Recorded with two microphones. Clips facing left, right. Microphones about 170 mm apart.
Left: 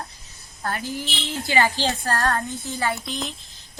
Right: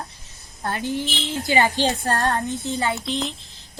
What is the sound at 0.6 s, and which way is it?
A woman's voice, 20° right (ahead or behind).